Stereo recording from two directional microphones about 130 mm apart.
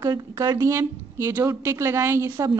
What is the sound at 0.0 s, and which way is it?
A woman's voice, 25° right (ahead or behind).